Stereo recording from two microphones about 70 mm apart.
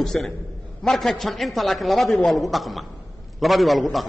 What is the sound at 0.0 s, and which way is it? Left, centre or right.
A man's voice, centre.